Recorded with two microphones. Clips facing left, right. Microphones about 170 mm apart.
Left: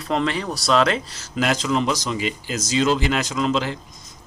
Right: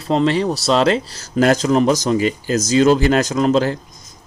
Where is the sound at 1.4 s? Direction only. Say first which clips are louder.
Right 7 dB; 45° right (ahead or behind).